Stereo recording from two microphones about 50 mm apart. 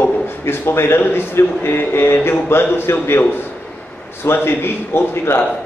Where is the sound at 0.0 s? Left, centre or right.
Left.